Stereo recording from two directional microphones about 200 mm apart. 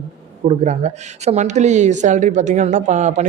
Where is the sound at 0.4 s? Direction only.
35° right (ahead or behind).